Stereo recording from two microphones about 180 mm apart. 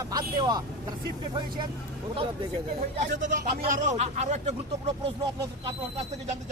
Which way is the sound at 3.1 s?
80° right.